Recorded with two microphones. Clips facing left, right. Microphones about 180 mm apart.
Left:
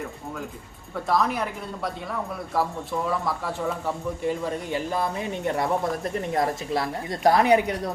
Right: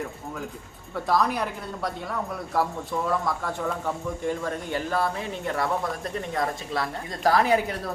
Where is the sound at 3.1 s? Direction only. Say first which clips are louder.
Even; 5° left (ahead or behind); by 6.8 s 25° left (ahead or behind).